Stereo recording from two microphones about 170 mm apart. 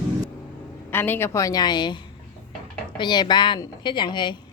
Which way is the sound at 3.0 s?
25° left (ahead or behind).